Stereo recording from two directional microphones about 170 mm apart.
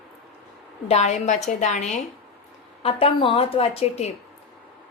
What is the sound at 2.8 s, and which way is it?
Speech, 35° left (ahead or behind).